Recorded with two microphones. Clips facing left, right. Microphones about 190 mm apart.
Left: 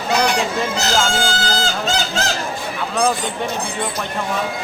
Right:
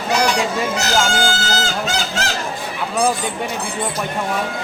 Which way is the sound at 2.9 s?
5° right (ahead or behind).